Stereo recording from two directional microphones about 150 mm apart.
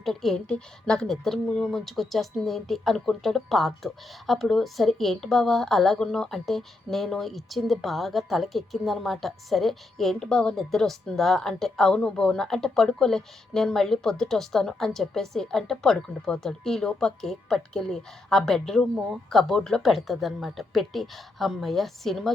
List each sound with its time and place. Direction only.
0.0 s a woman's voice: centre (ahead or behind)